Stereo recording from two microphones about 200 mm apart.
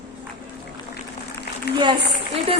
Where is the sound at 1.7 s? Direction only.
55° left (ahead or behind).